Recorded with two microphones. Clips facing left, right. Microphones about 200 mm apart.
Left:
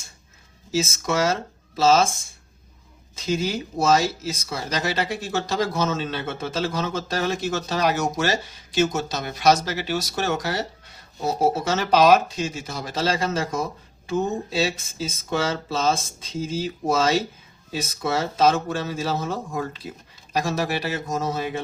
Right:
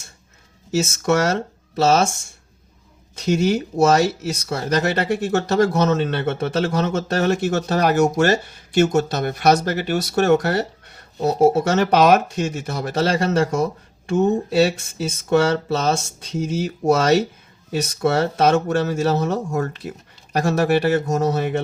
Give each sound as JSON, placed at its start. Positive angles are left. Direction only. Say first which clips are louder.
{"t": 1.0, "sound": "speech", "louder": "right 6 dB", "side_deg": -60}
{"t": 3.2, "sound": "speech", "louder": "right 6 dB", "side_deg": -65}